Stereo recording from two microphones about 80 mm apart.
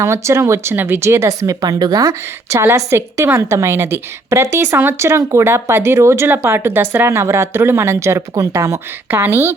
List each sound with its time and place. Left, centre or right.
0.0 s a woman's voice: right
2.6 s a woman's voice: right
9.0 s speech: right